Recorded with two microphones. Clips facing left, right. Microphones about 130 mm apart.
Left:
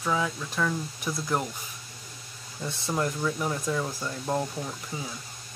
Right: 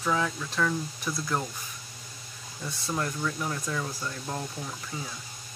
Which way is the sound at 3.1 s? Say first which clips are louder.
Left 3 dB; 10° left (ahead or behind).